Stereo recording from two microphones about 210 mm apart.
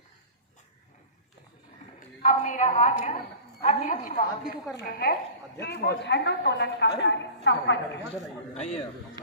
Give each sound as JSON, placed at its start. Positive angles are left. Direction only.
{"t": 2.2, "sound": "a woman's voice", "side_deg": 35}
{"t": 8.5, "sound": "a woman's voice", "side_deg": 30}